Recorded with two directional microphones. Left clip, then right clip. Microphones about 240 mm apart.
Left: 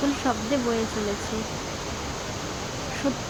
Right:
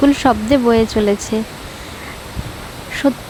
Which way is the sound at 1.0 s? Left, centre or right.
Right.